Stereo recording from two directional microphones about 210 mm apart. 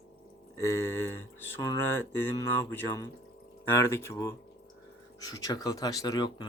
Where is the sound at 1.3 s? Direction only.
10° left (ahead or behind).